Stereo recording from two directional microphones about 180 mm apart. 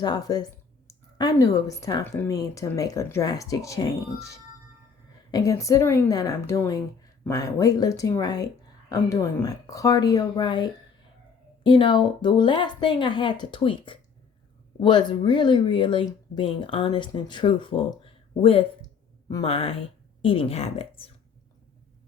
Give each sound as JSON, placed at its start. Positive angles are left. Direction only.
{"t": 0.0, "sound": "a woman's voice", "side_deg": 20}